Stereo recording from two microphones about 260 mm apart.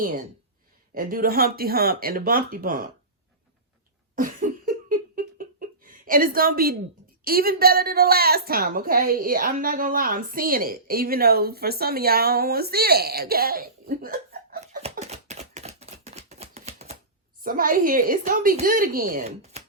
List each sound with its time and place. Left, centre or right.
0.9 s a woman's voice: right
4.1 s laughter: right
7.3 s a woman's voice: right
14.6 s a sound: right
17.4 s a woman's voice: right